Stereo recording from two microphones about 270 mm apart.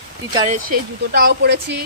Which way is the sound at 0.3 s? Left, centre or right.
Right.